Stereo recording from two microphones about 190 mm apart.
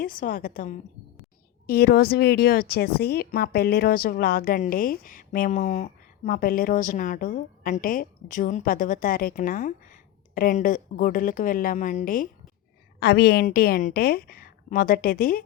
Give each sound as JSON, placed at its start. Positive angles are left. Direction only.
{"t": 0.0, "sound": "a woman's voice", "side_deg": 45}
{"t": 13.0, "sound": "a woman's voice", "side_deg": 60}